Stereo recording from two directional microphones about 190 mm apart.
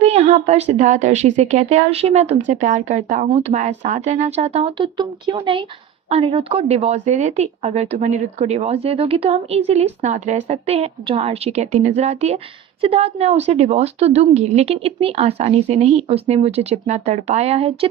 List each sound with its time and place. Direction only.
0.0 s a woman's voice: 35° right (ahead or behind)